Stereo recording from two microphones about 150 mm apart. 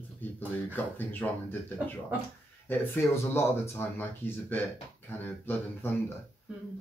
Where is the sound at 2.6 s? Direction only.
15° left (ahead or behind).